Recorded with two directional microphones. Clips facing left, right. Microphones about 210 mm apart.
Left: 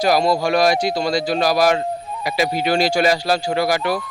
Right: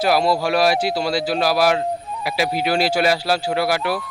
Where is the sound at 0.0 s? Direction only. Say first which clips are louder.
Left 1 dB; 5° right (ahead or behind).